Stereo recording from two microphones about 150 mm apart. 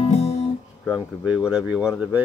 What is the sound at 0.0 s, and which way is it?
Guitar, 45° left (ahead or behind).